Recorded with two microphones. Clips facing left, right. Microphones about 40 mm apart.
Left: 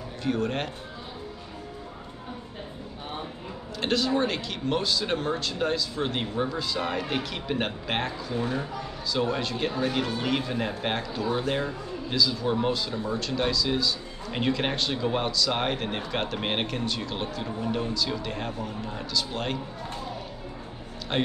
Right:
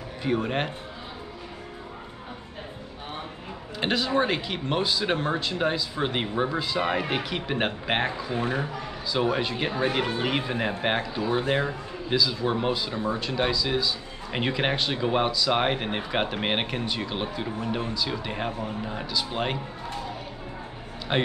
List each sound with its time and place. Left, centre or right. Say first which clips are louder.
0.2 s speech: right 2 dB; centre
3.8 s speech: right 1 dB; centre
21.1 s speech: right 2 dB; centre